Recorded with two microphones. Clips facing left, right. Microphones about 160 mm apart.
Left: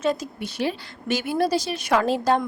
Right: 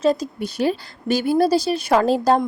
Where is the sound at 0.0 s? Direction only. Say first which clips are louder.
Right 5 dB; 35° right (ahead or behind).